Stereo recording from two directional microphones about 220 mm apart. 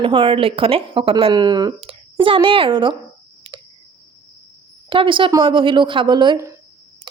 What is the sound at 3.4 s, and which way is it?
Clicking, 20° right (ahead or behind).